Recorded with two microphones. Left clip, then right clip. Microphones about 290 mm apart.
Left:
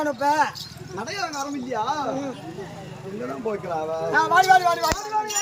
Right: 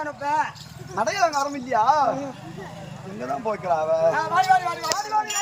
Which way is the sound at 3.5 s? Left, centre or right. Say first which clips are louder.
Right 5 dB; centre.